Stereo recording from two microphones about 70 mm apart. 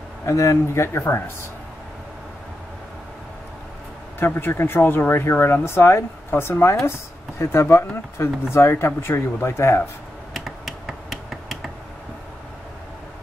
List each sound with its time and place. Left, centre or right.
0.3 s speech: left
4.2 s speech: left
10.3 s finger snapping: centre